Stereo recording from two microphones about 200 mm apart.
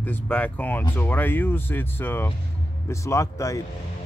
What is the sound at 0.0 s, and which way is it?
Speech, 10° left (ahead or behind).